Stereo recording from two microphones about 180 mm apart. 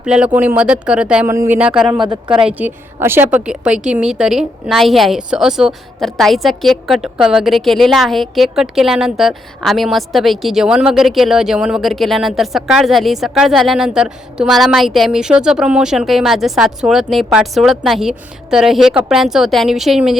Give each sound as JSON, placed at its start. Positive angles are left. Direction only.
{"t": 0.0, "sound": "a woman's voice", "side_deg": -5}
{"t": 2.0, "sound": "speech", "side_deg": -25}
{"t": 2.5, "sound": "a woman's voice", "side_deg": -10}